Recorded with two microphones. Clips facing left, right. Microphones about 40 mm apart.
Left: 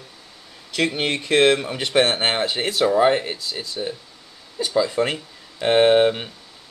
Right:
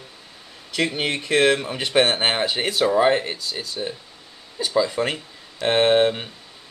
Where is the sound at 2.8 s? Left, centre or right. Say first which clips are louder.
Left 1 dB; centre.